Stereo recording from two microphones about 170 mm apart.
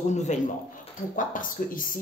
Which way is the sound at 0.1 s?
45° left (ahead or behind).